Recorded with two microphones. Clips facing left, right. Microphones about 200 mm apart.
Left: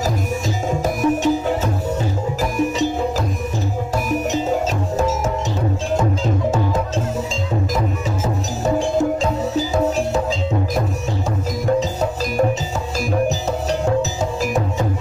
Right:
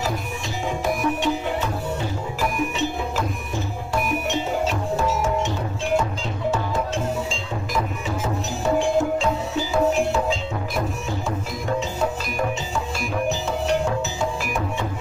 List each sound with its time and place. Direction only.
0.7 s music: 45° left (ahead or behind)
8.7 s music: 40° left (ahead or behind)
14.4 s music: 40° left (ahead or behind)